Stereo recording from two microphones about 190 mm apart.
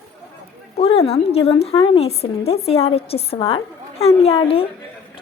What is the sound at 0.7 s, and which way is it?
A woman's voice, 30° left (ahead or behind).